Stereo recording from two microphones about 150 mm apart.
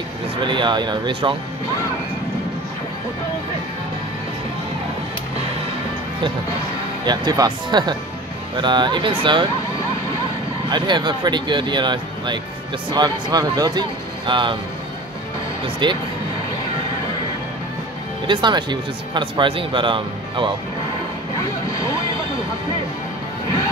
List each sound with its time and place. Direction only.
0.4 s speech: 30° right (ahead or behind)
7.1 s speech: 30° right (ahead or behind)
10.7 s speech: 30° right (ahead or behind)
15.6 s speech: 30° right (ahead or behind)
18.2 s speech: 30° right (ahead or behind)